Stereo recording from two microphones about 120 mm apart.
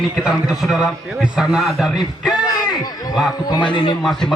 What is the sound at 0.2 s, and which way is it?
A man's voice, centre (ahead or behind).